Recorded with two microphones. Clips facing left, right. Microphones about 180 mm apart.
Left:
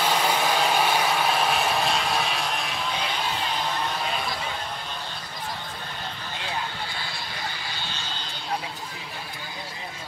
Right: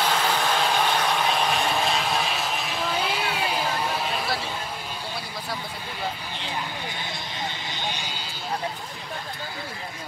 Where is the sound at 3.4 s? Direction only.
5° right (ahead or behind).